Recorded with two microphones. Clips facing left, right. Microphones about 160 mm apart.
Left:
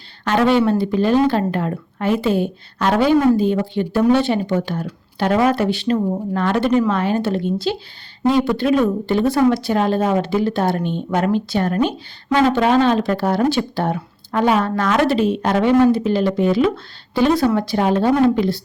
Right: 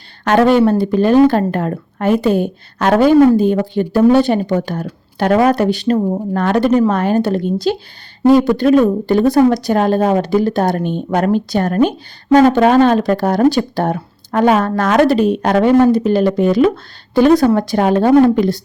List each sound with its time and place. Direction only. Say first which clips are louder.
0.3 s speech: right 5 dB; 50° right (ahead or behind)